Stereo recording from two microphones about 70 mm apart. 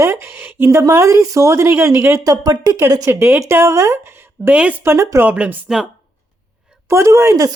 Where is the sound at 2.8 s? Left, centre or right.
Right.